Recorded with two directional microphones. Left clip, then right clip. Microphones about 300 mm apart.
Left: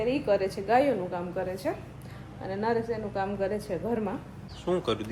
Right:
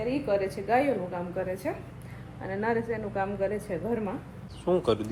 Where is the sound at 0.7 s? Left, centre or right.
Centre.